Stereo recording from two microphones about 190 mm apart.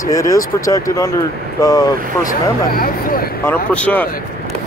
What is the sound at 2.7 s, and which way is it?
Speech, 50° left (ahead or behind).